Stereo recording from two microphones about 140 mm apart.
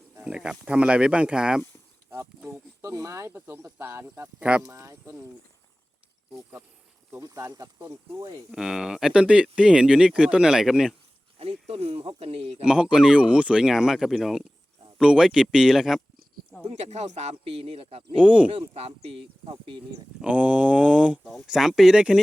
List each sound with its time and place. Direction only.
0.2 s speech: 5° right (ahead or behind)
2.5 s speech: 25° right (ahead or behind)
4.6 s speech: 20° right (ahead or behind)
7.2 s speech: 25° right (ahead or behind)
8.5 s speech: 5° right (ahead or behind)
11.3 s speech: 45° right (ahead or behind)
12.6 s speech: 5° right (ahead or behind)
16.6 s speech: 50° right (ahead or behind)
18.2 s speech: 5° right (ahead or behind)
18.5 s speech: 45° right (ahead or behind)
20.2 s speech: 10° right (ahead or behind)